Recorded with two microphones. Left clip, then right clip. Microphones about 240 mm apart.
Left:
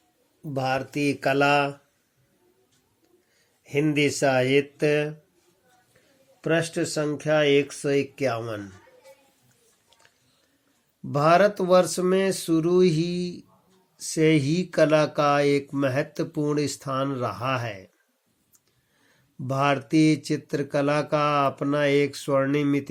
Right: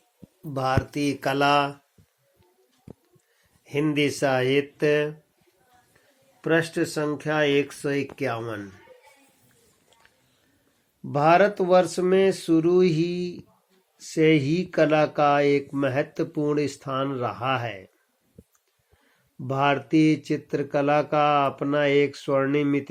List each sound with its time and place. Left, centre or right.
0.5 s speech: left
3.6 s speech: left
6.4 s speech: left
11.1 s speech: left
19.5 s speech: left